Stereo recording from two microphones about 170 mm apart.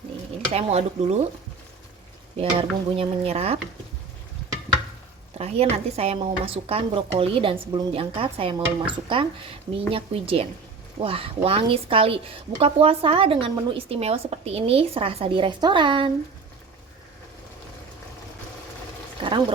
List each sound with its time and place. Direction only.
0.5 s a woman's voice: 40° right (ahead or behind)
2.4 s a woman's voice: 35° right (ahead or behind)
5.4 s a woman's voice: 35° right (ahead or behind)
19.2 s a sound: 30° right (ahead or behind)